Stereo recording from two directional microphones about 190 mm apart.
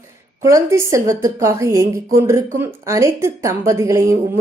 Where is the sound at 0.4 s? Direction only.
15° right (ahead or behind).